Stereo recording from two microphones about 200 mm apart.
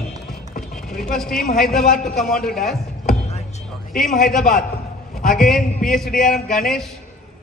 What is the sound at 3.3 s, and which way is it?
Music, 35° left (ahead or behind).